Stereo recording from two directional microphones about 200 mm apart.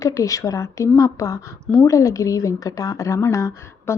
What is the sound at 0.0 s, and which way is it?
A woman's voice, 15° left (ahead or behind).